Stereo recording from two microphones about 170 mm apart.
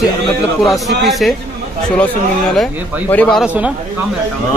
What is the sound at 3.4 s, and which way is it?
Speech, 10° right (ahead or behind).